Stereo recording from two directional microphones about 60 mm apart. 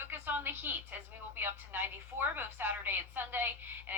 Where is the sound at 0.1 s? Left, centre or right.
Right.